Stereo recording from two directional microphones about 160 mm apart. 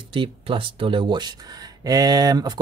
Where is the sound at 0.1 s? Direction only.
35° right (ahead or behind).